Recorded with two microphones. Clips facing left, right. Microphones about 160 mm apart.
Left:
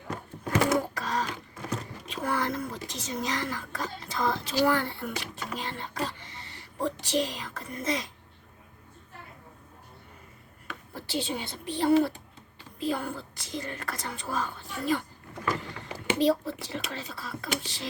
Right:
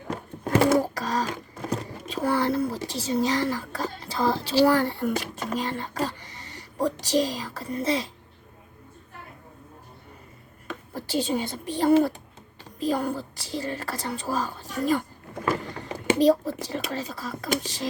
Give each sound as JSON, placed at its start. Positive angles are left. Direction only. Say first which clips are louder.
{"t": 0.6, "sound": "a sound", "louder": "right 5 dB", "side_deg": -35}
{"t": 7.0, "sound": "a woman's voice", "louder": "right 5 dB", "side_deg": -40}
{"t": 10.7, "sound": "a child's voice", "louder": "right 5 dB", "side_deg": -45}